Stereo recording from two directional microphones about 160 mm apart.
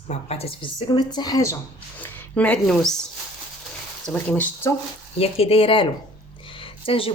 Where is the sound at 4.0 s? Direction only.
10° left (ahead or behind).